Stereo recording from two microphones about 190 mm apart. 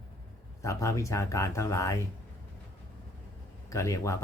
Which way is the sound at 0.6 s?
15° left (ahead or behind).